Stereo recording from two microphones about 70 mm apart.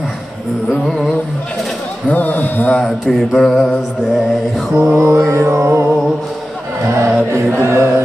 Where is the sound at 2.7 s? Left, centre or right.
Centre.